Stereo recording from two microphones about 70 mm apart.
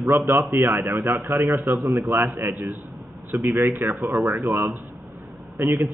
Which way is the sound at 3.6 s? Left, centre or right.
Right.